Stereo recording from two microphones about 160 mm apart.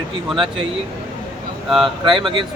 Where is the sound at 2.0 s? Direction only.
30° right (ahead or behind).